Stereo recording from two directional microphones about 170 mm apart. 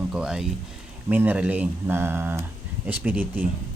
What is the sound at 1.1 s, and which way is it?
Speech, 10° right (ahead or behind).